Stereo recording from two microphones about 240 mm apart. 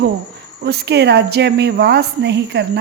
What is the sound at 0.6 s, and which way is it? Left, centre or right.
A woman's voice, right.